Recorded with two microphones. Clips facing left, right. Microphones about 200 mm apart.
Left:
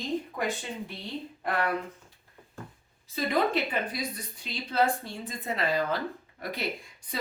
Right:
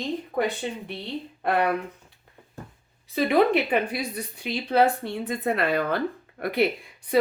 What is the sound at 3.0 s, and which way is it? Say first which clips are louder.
A woman's voice: right 7 dB; 65° right (ahead or behind).